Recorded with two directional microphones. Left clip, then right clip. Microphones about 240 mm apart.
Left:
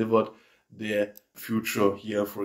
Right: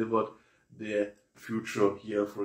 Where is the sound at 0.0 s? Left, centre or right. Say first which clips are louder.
Left 5 dB; left.